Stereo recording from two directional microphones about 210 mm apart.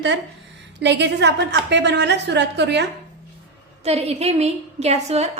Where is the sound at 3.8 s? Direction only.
30° right (ahead or behind).